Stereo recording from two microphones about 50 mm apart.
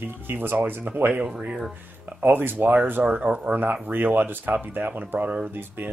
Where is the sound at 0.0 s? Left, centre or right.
Right.